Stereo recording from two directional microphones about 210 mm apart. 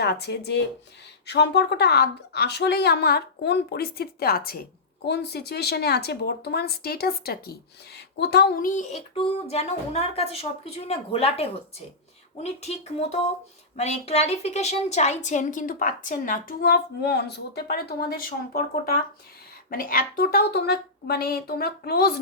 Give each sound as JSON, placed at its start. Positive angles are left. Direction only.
{"t": 0.0, "sound": "a woman's voice", "side_deg": 50}